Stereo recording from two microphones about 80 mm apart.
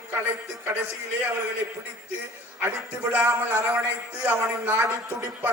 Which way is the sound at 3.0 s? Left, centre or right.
Right.